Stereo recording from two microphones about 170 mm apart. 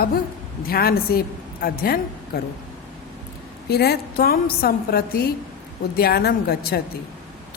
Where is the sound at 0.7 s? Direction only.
65° left (ahead or behind).